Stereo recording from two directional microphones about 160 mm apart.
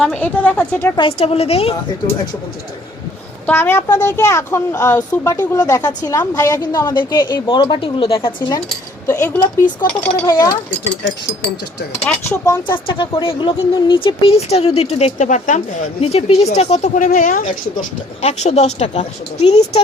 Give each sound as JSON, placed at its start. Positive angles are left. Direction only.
{"t": 0.0, "sound": "a woman's voice", "side_deg": 10}
{"t": 0.9, "sound": "speech", "side_deg": 35}
{"t": 3.4, "sound": "a woman's voice", "side_deg": 15}
{"t": 9.0, "sound": "a woman's voice", "side_deg": 15}
{"t": 12.3, "sound": "a woman's voice", "side_deg": 15}
{"t": 12.9, "sound": "speech", "side_deg": 30}